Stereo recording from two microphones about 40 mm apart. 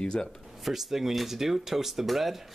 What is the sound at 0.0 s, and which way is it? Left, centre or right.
Speech, centre.